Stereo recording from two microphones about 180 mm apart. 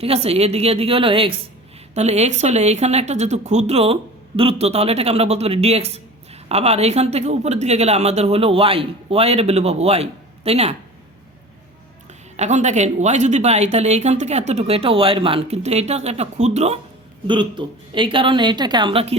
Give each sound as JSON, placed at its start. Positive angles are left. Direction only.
{"t": 0.0, "sound": "a woman's voice", "side_deg": -35}
{"t": 12.4, "sound": "a woman's voice", "side_deg": -40}